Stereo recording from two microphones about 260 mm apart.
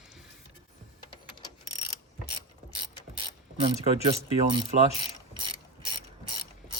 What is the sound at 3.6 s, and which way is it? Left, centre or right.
Speech, right.